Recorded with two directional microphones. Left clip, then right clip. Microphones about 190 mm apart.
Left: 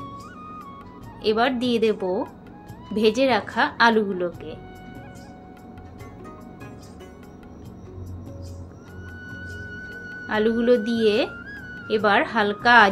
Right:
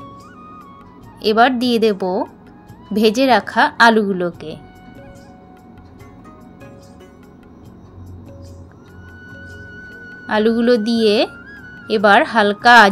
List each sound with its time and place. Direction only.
0.0 s music: centre (ahead or behind)
1.2 s a woman's voice: 55° right (ahead or behind)
9.3 s music: centre (ahead or behind)
10.2 s a woman's voice: 55° right (ahead or behind)
11.2 s music: centre (ahead or behind)
11.9 s a woman's voice: 55° right (ahead or behind)